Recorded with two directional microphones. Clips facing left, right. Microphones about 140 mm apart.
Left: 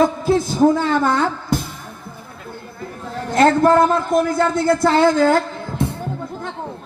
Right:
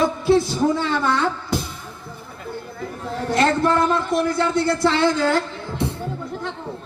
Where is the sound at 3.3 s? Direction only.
45° left (ahead or behind).